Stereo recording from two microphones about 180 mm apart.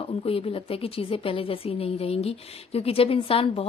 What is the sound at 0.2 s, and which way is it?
A woman's voice, 30° left (ahead or behind).